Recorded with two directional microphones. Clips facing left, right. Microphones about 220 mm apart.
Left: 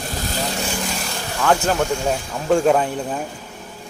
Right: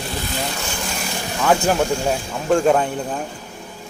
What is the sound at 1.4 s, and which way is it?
Speech, 10° right (ahead or behind).